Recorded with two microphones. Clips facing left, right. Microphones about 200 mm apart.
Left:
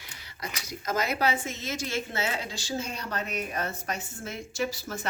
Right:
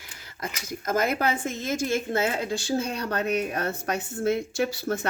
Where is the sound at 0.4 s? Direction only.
50° right (ahead or behind).